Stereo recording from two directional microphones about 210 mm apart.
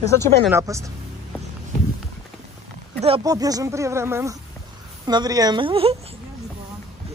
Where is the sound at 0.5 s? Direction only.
15° right (ahead or behind).